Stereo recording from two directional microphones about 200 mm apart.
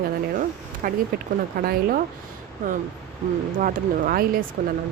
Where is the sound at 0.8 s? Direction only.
45° right (ahead or behind).